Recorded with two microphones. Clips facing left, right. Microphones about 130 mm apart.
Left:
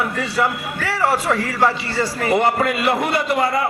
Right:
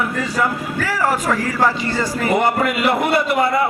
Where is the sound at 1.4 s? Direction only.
30° left (ahead or behind).